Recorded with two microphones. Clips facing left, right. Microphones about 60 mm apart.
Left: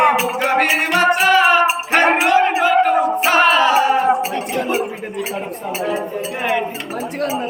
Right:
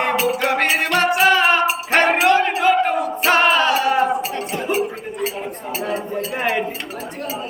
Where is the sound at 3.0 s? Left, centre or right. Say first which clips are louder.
Left 3 dB; centre.